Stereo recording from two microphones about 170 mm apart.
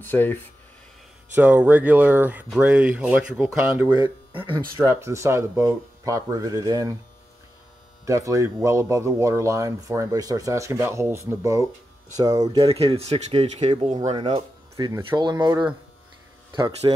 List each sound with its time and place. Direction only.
0.0 s speech: 10° left (ahead or behind)
1.3 s speech: 10° right (ahead or behind)
8.0 s speech: 20° right (ahead or behind)
12.7 s speech: 35° right (ahead or behind)
14.9 s speech: 15° right (ahead or behind)
15.1 s speech: 25° right (ahead or behind)
16.8 s speech: 25° right (ahead or behind)